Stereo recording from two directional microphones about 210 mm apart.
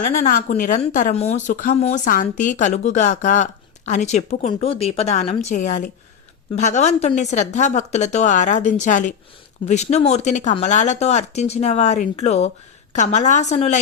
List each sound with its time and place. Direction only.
0.0 s a woman's voice: 40° left (ahead or behind)